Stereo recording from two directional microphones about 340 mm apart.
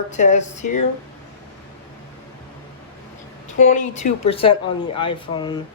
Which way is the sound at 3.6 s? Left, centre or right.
Left.